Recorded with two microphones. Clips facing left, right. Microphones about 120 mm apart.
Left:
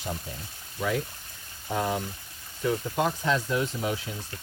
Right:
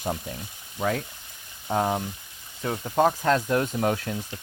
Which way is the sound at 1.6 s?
40° right (ahead or behind).